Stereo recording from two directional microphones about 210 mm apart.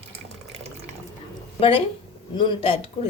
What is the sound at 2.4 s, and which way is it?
Speech, 25° left (ahead or behind).